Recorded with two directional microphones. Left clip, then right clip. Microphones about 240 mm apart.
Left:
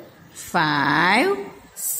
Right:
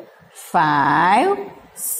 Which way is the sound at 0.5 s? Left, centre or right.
Centre.